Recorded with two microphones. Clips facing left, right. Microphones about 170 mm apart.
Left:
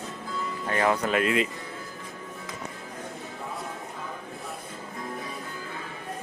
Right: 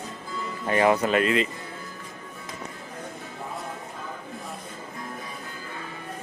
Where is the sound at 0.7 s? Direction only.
15° right (ahead or behind).